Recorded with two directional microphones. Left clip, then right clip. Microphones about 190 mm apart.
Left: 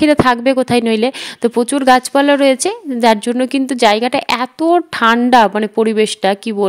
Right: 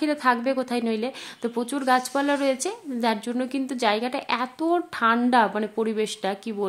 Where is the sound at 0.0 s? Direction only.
45° left (ahead or behind).